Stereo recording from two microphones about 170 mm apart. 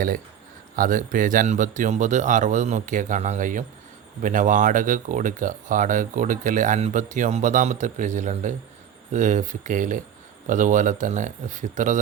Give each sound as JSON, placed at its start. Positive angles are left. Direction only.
{"t": 0.8, "sound": "speech", "side_deg": -50}